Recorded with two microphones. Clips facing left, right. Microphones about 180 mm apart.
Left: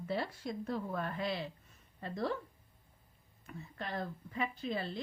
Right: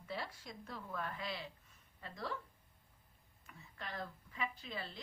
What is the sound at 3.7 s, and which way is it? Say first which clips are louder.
A woman's voice: left 6 dB; 55° left (ahead or behind).